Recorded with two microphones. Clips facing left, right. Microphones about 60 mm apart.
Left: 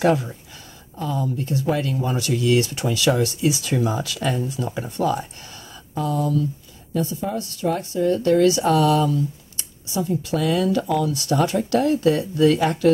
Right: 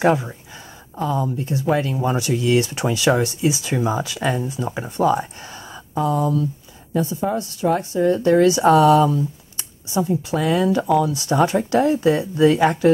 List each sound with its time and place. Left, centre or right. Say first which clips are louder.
0.0 s a woman's voice: right 1 dB; right
3.4 s a woman's voice: even; centre